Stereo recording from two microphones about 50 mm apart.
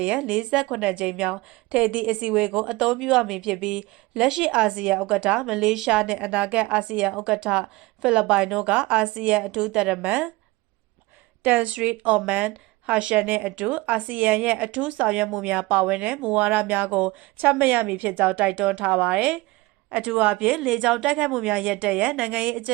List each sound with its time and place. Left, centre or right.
0.0 s a woman's voice: right
2.8 s a woman's voice: centre
11.4 s a woman's voice: right
13.1 s a woman's voice: right
21.0 s a woman's voice: centre